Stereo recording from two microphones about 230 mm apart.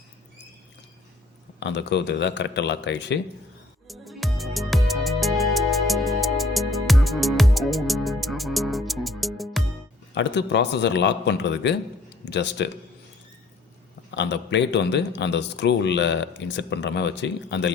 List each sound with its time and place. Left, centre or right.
1.5 s a man's voice: left
3.8 s music: centre
10.2 s a man's voice: left
14.2 s a man's voice: left